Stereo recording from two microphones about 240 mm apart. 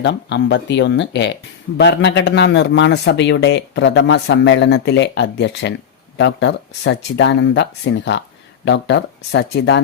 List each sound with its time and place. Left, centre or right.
0.0 s a man's voice: left